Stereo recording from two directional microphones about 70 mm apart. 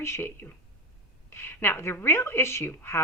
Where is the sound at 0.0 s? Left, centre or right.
Left.